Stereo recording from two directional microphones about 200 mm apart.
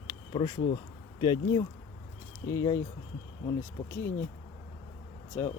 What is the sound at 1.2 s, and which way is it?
A man's voice, 20° left (ahead or behind).